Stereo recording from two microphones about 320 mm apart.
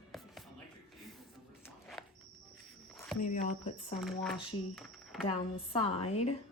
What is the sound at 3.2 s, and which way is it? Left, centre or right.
Speech, left.